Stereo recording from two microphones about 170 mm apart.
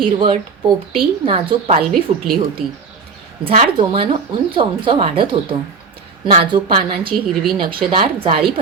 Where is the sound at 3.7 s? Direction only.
30° right (ahead or behind).